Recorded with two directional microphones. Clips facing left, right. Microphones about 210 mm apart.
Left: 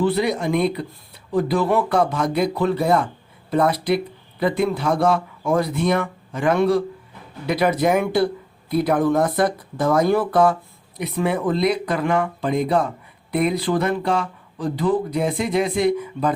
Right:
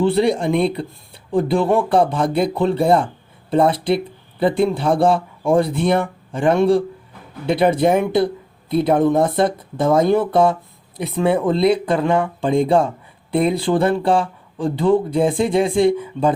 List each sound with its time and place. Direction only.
0.0 s speech: 30° right (ahead or behind)